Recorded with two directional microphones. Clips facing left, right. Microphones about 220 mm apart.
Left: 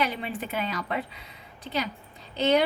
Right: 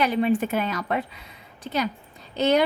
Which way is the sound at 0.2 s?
50° right (ahead or behind).